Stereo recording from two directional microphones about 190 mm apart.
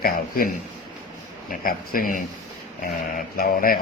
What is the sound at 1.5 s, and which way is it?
Speech, 50° left (ahead or behind).